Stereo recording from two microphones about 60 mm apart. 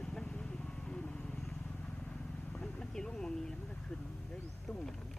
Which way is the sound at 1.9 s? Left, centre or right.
Centre.